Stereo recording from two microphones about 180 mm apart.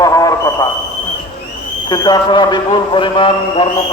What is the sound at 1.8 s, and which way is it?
A man's voice, 25° left (ahead or behind).